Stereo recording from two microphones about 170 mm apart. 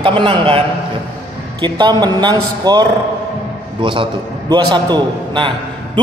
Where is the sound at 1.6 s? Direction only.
25° right (ahead or behind).